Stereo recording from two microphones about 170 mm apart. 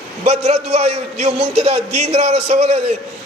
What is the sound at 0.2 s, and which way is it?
Speech, 40° right (ahead or behind).